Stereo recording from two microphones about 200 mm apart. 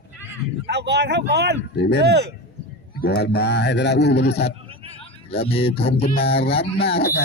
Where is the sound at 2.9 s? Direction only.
55° left (ahead or behind).